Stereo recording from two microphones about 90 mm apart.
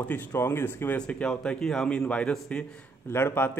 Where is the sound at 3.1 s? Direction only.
25° left (ahead or behind).